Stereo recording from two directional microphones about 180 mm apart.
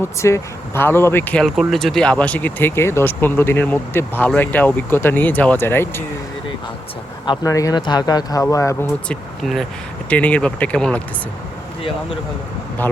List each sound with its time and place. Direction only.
0.0 s speech: 15° left (ahead or behind)
7.3 s speech: 20° left (ahead or behind)
9.0 s speech: centre (ahead or behind)